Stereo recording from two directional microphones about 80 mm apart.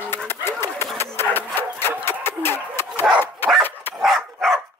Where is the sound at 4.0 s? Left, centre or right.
Centre.